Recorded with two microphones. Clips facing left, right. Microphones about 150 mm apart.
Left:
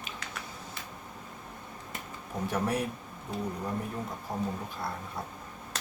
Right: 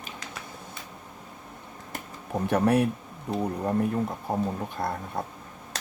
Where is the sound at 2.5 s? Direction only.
60° right (ahead or behind).